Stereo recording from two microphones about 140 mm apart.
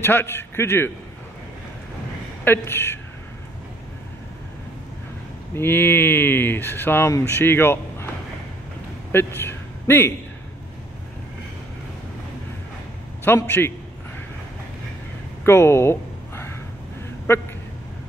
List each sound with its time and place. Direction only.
0.0 s speech: 15° left (ahead or behind)
2.4 s speech: 15° left (ahead or behind)
5.5 s speech: 15° left (ahead or behind)
9.1 s a man's voice: 15° left (ahead or behind)
13.2 s speech: 15° left (ahead or behind)
15.4 s a sound: 20° left (ahead or behind)